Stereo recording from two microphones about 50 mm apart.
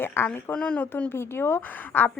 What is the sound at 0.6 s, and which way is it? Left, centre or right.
Speech, left.